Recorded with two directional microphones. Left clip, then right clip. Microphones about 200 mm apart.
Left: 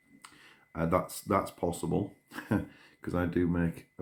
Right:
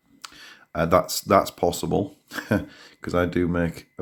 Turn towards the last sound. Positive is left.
turn(degrees=-40)  # may be behind; listen again after turning